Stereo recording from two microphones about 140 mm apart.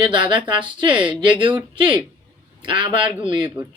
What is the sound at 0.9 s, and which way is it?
Speech, 10° right (ahead or behind).